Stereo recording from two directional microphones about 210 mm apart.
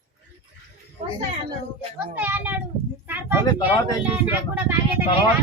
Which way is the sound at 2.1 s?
10° right (ahead or behind).